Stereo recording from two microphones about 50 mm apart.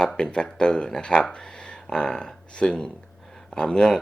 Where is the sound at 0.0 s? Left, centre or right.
Centre.